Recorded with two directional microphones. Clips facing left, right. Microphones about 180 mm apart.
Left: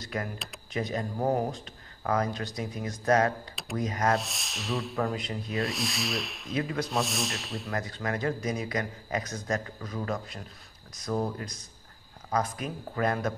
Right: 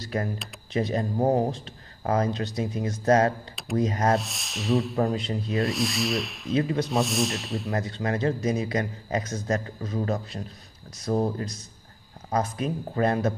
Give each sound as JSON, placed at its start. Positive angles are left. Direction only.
{"t": 0.0, "sound": "speech", "side_deg": -30}
{"t": 4.2, "sound": "rub", "side_deg": 0}
{"t": 5.0, "sound": "speech", "side_deg": -25}
{"t": 5.6, "sound": "rub", "side_deg": 0}
{"t": 6.5, "sound": "speech", "side_deg": -30}
{"t": 6.9, "sound": "rub", "side_deg": 0}
{"t": 7.7, "sound": "speech", "side_deg": -30}